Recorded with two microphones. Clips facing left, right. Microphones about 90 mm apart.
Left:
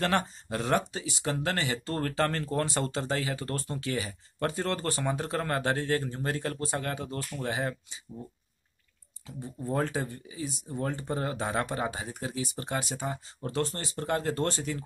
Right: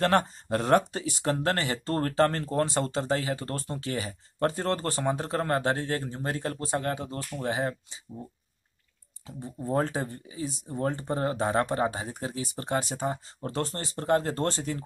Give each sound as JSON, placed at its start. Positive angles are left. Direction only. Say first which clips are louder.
{"t": 0.0, "sound": "speech", "louder": "right 4 dB", "side_deg": -45}
{"t": 9.2, "sound": "speech", "louder": "right 1 dB", "side_deg": -30}